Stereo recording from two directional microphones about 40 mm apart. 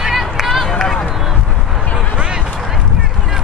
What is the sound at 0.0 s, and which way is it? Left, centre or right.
Run, centre.